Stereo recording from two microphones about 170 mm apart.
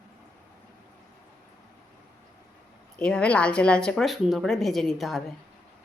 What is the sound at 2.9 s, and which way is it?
Speech, 5° left (ahead or behind).